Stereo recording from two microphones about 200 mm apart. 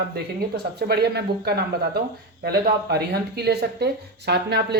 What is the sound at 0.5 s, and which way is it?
Speech, 55° right (ahead or behind).